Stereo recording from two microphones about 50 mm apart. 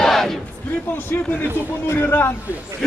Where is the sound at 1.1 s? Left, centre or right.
Left.